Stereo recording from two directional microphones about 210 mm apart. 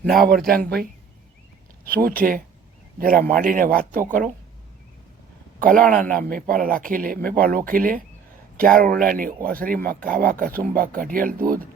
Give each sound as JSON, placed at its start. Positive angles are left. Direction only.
{"t": 0.2, "sound": "speech", "side_deg": -45}
{"t": 1.9, "sound": "speech", "side_deg": -45}
{"t": 5.5, "sound": "speech", "side_deg": -40}